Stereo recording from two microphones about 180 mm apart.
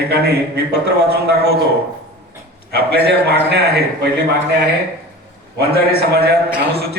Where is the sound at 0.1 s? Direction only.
65° right (ahead or behind).